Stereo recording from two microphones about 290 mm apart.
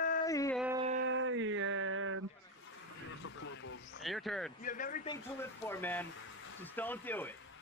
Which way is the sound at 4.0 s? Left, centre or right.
Centre.